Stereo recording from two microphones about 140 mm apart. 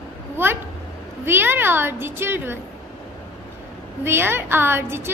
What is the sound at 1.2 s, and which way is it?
A woman's voice, 15° right (ahead or behind).